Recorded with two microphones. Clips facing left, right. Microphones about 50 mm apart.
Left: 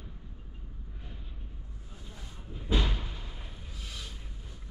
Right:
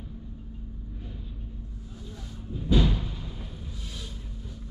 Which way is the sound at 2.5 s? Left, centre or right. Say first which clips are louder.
Right 7 dB; centre.